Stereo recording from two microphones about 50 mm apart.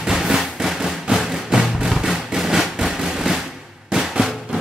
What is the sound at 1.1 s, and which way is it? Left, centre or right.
Music, centre.